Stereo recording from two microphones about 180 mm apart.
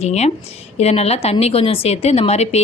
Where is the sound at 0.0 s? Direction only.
35° left (ahead or behind).